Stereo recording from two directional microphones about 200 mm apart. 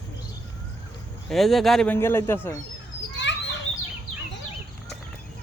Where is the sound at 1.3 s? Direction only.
Centre (ahead or behind).